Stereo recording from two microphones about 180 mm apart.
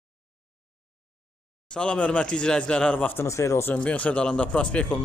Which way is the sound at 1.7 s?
5° left (ahead or behind).